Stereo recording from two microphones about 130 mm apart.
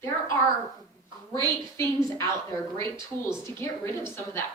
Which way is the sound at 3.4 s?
20° left (ahead or behind).